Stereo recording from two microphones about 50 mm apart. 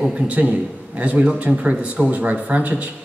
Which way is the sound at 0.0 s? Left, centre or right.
Centre.